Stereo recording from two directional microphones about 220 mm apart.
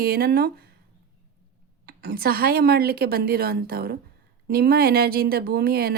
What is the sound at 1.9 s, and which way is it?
Speech, 45° right (ahead or behind).